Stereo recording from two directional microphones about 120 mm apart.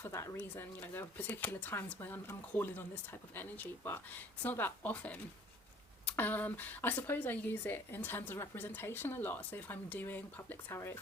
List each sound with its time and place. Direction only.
0.0 s speech: 25° left (ahead or behind)